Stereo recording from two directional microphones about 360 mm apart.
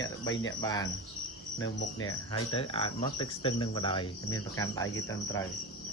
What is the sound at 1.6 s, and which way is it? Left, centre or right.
Cricket, left.